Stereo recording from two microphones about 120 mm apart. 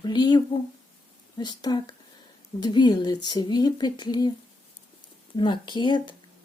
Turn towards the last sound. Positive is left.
turn(degrees=40)  # may be behind; listen again after turning